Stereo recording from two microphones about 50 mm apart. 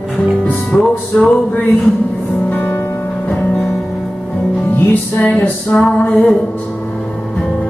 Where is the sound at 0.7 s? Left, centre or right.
Left.